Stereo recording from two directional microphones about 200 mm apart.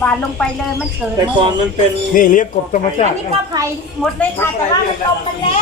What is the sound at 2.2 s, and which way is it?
Speech, 40° left (ahead or behind).